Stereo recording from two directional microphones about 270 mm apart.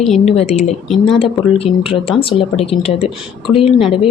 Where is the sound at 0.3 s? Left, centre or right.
Left.